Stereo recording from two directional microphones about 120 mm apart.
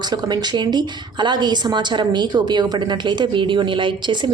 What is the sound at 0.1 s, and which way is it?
A woman's voice, 35° right (ahead or behind).